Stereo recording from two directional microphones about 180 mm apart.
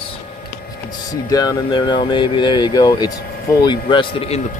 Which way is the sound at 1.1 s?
20° left (ahead or behind).